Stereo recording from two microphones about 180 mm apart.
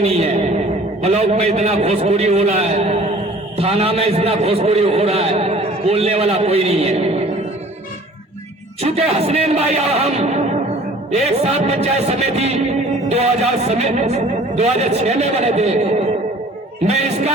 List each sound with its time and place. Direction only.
0.0 s a sound: 35° right (ahead or behind)
1.0 s speech: 35° right (ahead or behind)
8.8 s speech: 35° right (ahead or behind)